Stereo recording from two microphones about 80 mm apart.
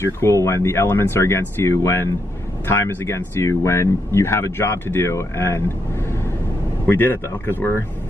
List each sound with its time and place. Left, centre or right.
0.0 s speech: left
6.9 s speech: left